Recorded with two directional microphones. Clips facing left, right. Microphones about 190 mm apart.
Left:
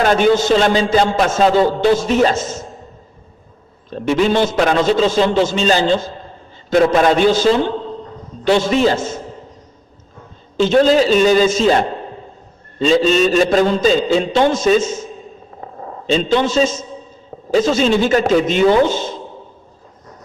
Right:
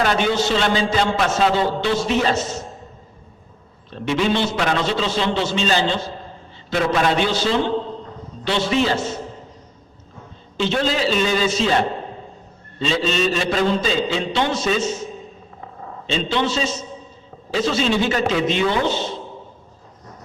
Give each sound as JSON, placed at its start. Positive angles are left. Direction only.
{"t": 0.0, "sound": "a man's voice", "side_deg": 45}
{"t": 3.8, "sound": "a man's voice", "side_deg": 45}
{"t": 10.6, "sound": "a man's voice", "side_deg": 45}